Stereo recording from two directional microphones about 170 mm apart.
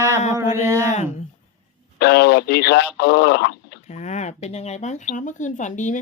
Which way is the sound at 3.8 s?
40° left (ahead or behind).